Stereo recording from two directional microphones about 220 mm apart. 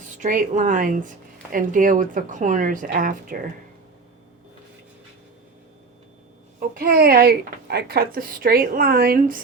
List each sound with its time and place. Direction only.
0.2 s a woman's voice: 35° right (ahead or behind)
6.7 s a woman's voice: 45° right (ahead or behind)